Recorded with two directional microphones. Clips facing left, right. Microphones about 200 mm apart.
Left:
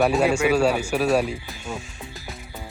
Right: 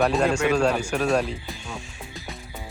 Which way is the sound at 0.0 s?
5° left (ahead or behind).